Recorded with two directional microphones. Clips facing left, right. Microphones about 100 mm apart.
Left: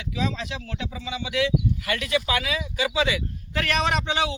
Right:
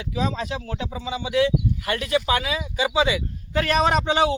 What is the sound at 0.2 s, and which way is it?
Speech, 40° right (ahead or behind).